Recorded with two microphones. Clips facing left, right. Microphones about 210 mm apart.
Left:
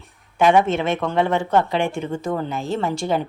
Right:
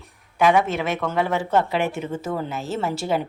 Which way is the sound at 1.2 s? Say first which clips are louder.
Left 2 dB; 5° right (ahead or behind).